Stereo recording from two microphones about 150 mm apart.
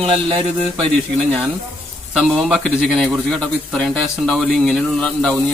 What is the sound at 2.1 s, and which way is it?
Speech, 5° right (ahead or behind).